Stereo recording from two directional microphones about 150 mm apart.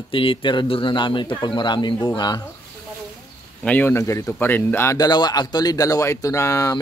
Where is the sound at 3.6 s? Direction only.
10° left (ahead or behind).